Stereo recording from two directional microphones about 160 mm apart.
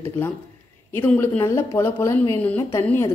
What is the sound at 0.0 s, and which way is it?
Speech, 15° left (ahead or behind).